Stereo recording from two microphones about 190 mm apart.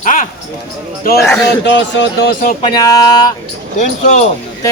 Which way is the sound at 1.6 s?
65° left (ahead or behind).